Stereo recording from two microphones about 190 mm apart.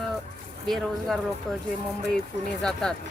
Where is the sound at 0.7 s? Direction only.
Centre (ahead or behind).